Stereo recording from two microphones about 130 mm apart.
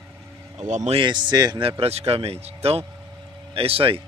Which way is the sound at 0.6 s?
65° right (ahead or behind).